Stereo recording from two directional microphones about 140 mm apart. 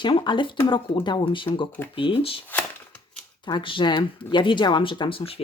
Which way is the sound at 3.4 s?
35° left (ahead or behind).